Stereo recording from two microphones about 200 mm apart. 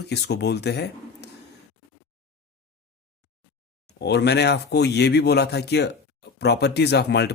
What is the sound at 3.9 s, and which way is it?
Speech, 55° left (ahead or behind).